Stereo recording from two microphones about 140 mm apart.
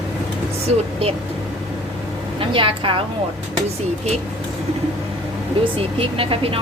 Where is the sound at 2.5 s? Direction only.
40° right (ahead or behind).